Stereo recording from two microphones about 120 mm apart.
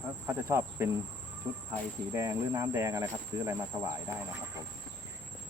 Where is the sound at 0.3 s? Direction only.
20° right (ahead or behind).